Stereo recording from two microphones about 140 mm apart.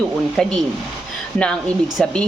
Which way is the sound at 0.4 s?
5° left (ahead or behind).